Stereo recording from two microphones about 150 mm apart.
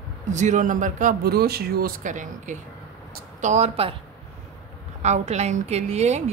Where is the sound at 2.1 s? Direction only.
55° right (ahead or behind).